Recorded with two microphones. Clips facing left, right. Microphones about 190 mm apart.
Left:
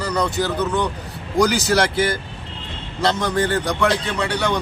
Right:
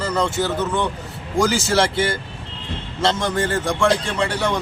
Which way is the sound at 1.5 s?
25° right (ahead or behind).